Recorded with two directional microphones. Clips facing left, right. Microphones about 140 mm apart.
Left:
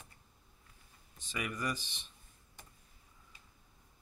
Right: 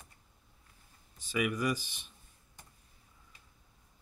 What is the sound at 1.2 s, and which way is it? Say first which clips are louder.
Speech: right 7 dB; 5° right (ahead or behind).